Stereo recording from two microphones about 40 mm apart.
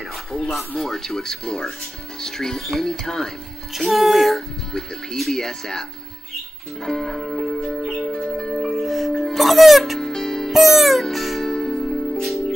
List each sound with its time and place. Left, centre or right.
0.1 s speech: centre
3.7 s speech: centre
6.8 s music: centre
8.6 s music: centre
9.9 s music: centre
10.5 s music: centre
11.4 s music: centre